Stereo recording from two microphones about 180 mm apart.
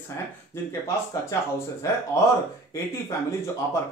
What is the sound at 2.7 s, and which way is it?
Speech, 15° left (ahead or behind).